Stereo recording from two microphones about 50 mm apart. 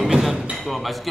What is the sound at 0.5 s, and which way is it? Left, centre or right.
Speech, centre.